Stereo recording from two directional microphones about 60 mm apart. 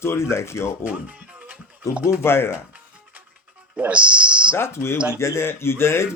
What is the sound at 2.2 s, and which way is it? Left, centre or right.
Speech, left.